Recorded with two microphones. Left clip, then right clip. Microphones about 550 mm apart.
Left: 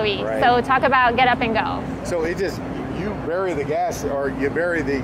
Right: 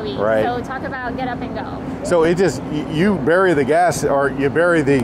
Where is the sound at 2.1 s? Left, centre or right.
Right.